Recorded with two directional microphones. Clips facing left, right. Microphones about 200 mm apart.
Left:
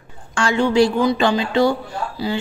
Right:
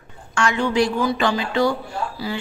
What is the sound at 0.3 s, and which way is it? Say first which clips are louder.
A woman's voice: left 3 dB; 30° left (ahead or behind).